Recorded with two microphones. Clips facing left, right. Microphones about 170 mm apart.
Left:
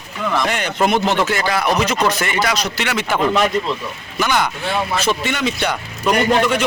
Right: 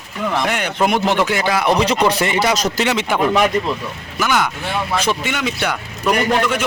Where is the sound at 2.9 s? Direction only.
15° right (ahead or behind).